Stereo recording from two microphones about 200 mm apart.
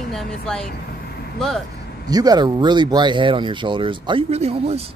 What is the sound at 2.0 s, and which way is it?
Speech, 20° right (ahead or behind).